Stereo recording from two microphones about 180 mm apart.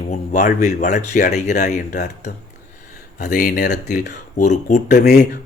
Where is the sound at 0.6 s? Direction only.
40° left (ahead or behind); by 3.7 s 55° left (ahead or behind).